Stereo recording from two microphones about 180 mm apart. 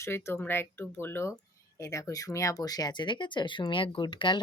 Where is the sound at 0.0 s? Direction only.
15° left (ahead or behind).